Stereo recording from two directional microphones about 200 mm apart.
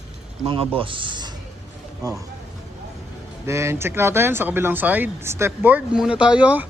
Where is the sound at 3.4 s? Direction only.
15° right (ahead or behind).